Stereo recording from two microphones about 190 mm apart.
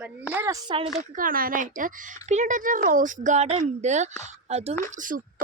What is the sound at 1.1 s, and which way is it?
Speech, 50° right (ahead or behind).